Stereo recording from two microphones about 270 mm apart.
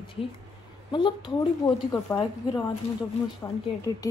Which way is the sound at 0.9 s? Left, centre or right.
Centre.